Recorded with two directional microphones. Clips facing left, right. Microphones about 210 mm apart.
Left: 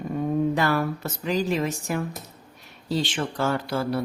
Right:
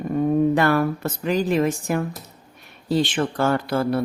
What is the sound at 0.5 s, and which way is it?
Speech, 55° right (ahead or behind).